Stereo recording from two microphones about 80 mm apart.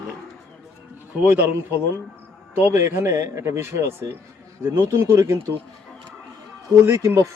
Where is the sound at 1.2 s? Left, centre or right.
Right.